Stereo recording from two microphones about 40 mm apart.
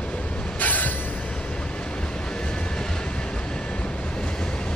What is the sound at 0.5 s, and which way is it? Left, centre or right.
Train, left.